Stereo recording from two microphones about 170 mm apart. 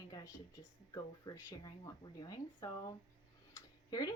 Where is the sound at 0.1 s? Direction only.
20° left (ahead or behind).